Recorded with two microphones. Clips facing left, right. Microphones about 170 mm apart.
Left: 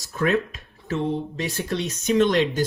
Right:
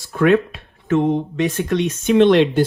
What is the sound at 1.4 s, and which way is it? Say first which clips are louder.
Speech: right 8 dB; 35° left (ahead or behind).